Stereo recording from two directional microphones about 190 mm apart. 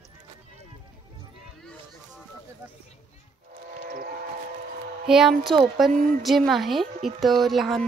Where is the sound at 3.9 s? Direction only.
50° right (ahead or behind).